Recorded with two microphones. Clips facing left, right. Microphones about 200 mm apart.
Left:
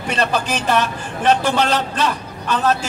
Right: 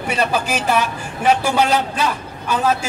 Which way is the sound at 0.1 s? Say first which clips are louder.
Even; 10° right (ahead or behind).